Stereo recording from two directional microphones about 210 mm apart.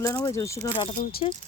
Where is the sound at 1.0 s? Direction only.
35° left (ahead or behind).